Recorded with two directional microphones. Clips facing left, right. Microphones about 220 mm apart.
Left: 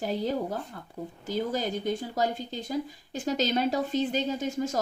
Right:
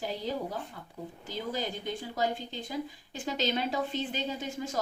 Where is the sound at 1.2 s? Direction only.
45° left (ahead or behind).